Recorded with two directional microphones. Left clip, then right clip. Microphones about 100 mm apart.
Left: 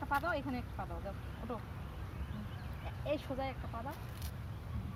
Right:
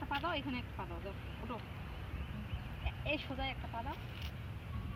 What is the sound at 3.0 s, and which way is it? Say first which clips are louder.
Speech: left 1 dB; 45° left (ahead or behind).